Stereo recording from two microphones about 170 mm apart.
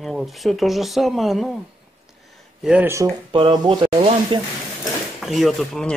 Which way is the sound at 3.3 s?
30° right (ahead or behind).